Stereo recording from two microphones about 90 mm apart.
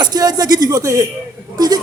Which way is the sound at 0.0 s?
50° right (ahead or behind).